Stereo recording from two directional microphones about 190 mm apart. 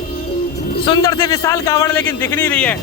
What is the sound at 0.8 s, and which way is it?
A man's voice, 25° left (ahead or behind).